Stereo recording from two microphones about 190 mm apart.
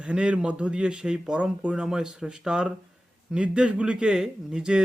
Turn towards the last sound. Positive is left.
turn(degrees=-5)  # may be behind; listen again after turning